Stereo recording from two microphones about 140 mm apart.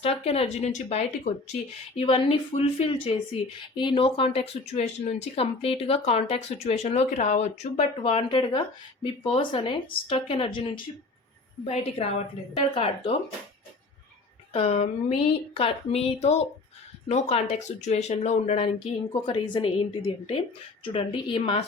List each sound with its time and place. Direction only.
0.0 s speech: 45° left (ahead or behind)
2.0 s speech: 40° left (ahead or behind)
14.5 s speech: 45° left (ahead or behind)
19.1 s speech: 40° left (ahead or behind)